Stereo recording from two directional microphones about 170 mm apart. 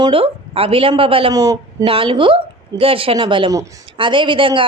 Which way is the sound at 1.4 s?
20° right (ahead or behind).